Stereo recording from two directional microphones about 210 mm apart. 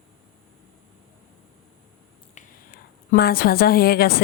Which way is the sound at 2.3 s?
40° left (ahead or behind).